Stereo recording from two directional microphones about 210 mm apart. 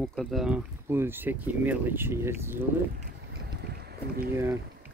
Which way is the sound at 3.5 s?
50° right (ahead or behind).